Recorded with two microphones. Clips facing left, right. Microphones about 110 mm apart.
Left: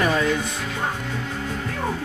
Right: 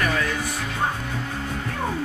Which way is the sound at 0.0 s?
20° left (ahead or behind).